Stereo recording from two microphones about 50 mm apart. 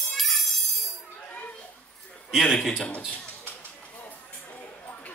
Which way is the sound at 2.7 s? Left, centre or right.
Left.